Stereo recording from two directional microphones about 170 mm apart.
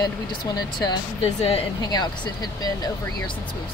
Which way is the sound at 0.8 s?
35° left (ahead or behind).